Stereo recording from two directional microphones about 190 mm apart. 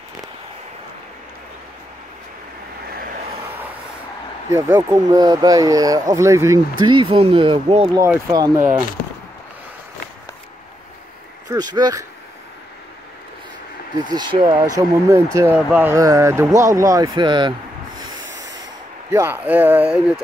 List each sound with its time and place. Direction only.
4.5 s speech: 15° right (ahead or behind); by 8.0 s 30° right (ahead or behind)
8.0 s speech: 15° right (ahead or behind)
11.4 s speech: 20° right (ahead or behind)
13.9 s speech: 20° right (ahead or behind)
18.2 s sanding: 70° right (ahead or behind)
19.1 s speech: 10° right (ahead or behind)